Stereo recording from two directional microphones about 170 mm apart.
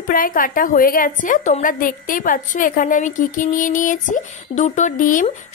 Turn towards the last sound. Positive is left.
turn(degrees=50)  # may be behind; listen again after turning